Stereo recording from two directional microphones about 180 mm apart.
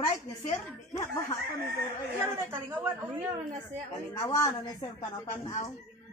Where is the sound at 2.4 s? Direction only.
15° right (ahead or behind).